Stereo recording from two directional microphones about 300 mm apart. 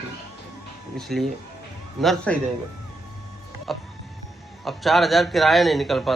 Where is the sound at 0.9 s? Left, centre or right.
Centre.